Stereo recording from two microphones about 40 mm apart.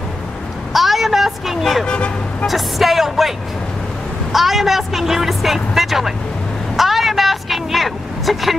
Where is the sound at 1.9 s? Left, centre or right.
Left.